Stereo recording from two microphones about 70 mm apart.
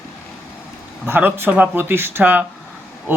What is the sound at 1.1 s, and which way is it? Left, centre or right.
Speech, right.